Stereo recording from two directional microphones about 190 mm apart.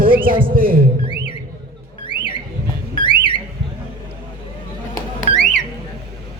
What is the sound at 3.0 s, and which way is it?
Alarm, 25° left (ahead or behind).